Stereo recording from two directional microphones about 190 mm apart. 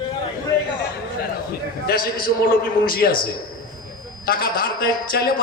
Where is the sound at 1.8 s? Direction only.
50° left (ahead or behind).